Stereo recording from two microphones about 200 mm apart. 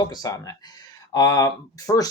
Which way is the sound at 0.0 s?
20° left (ahead or behind).